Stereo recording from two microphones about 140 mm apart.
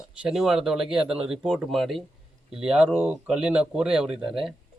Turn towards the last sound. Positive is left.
turn(degrees=0)  # may be behind; listen again after turning